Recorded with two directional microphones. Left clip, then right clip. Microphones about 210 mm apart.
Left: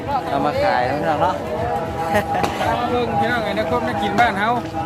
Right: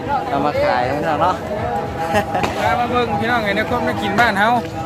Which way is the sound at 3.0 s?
25° right (ahead or behind).